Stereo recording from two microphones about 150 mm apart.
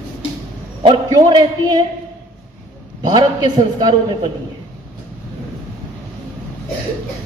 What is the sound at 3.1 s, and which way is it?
A man's voice, 30° right (ahead or behind).